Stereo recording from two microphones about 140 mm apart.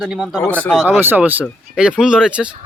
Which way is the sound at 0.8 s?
15° right (ahead or behind).